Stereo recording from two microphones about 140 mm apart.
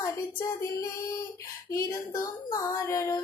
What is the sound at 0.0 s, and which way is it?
Female singing, 20° left (ahead or behind).